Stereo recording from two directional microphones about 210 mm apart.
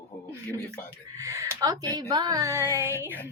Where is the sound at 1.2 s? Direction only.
15° right (ahead or behind).